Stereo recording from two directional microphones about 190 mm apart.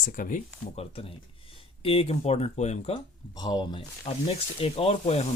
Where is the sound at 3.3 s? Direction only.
20° left (ahead or behind).